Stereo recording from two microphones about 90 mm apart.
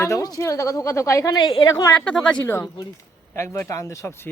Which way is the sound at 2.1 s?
10° left (ahead or behind).